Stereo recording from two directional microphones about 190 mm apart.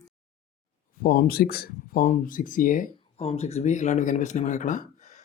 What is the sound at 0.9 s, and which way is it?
Speech, 45° left (ahead or behind).